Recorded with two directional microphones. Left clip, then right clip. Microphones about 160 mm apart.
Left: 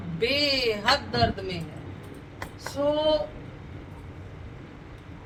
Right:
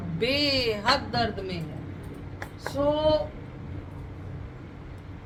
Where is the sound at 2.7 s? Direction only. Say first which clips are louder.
Even; 25° right (ahead or behind).